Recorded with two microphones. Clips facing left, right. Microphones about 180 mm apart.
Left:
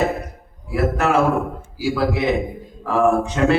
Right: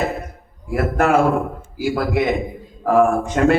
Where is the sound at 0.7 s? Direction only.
50° right (ahead or behind).